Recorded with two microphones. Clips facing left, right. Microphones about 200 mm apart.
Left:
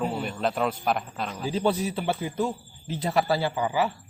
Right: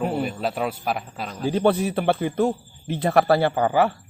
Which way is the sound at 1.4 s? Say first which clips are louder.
Right 6 dB; 60° right (ahead or behind).